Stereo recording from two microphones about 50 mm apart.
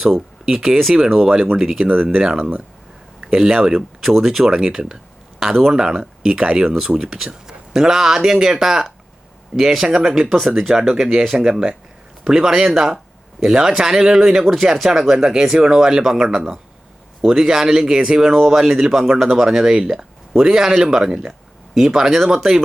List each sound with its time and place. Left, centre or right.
0.0 s speech: centre
10.2 s speech: centre